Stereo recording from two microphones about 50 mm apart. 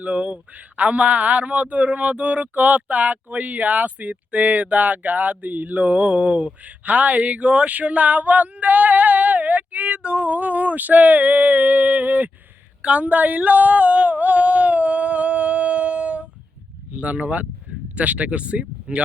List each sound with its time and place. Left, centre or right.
0.0 s a man's voice: right
12.8 s a sound: right
16.9 s speech: right